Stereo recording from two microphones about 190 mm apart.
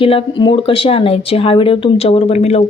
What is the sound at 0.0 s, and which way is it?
Speech, 30° left (ahead or behind).